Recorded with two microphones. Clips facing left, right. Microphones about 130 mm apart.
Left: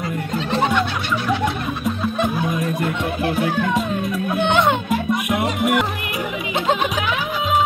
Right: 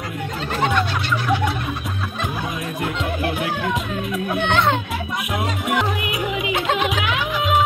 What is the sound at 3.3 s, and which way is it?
Music, 40° left (ahead or behind).